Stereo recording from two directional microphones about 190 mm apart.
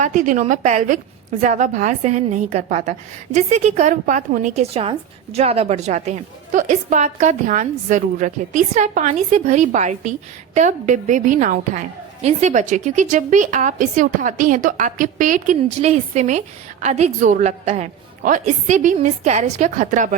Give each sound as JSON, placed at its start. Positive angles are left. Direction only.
{"t": 0.0, "sound": "a woman's voice", "side_deg": -40}